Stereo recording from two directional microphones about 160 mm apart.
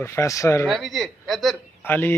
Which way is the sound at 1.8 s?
10° left (ahead or behind).